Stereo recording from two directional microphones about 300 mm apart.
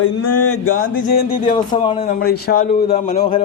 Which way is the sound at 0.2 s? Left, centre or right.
Left.